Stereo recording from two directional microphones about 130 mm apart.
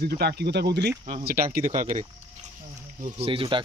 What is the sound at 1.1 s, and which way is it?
Speech, 85° right.